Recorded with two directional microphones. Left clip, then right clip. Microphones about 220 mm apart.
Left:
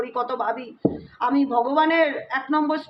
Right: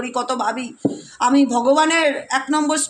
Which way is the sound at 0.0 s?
50° right (ahead or behind).